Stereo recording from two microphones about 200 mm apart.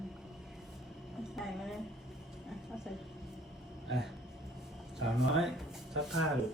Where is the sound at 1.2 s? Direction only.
Centre (ahead or behind).